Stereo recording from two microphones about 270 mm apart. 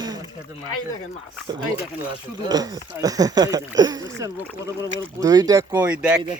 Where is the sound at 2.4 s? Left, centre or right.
Centre.